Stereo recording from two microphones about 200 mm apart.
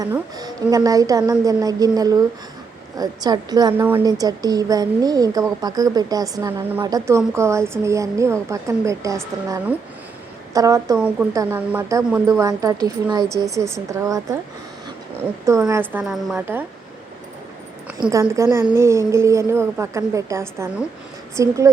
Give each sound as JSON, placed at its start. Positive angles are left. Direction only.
{"t": 0.0, "sound": "a woman's voice", "side_deg": -20}
{"t": 10.9, "sound": "a woman's voice", "side_deg": -5}
{"t": 17.9, "sound": "a woman's voice", "side_deg": -15}